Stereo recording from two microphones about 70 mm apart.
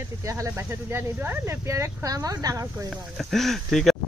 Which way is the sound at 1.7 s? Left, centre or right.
Right.